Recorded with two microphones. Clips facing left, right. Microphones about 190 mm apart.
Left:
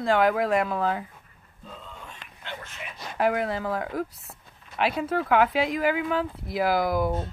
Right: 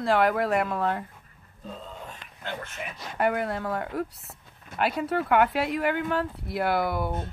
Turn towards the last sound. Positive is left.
turn(degrees=0)  # may be behind; listen again after turning